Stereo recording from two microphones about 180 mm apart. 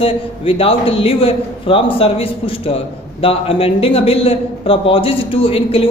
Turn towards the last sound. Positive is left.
turn(degrees=30)  # may be behind; listen again after turning